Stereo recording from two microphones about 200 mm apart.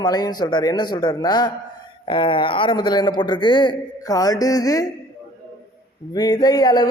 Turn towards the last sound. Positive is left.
turn(degrees=20)  # may be behind; listen again after turning